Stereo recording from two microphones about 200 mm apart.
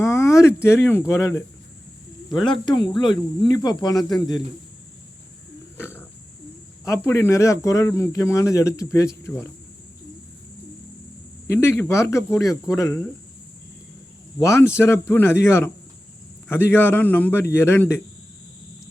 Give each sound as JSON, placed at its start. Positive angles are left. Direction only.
{"t": 0.0, "sound": "speech", "side_deg": 15}
{"t": 5.7, "sound": "pig", "side_deg": 10}
{"t": 6.8, "sound": "speech", "side_deg": 15}
{"t": 11.4, "sound": "speech", "side_deg": 10}
{"t": 14.4, "sound": "speech", "side_deg": 15}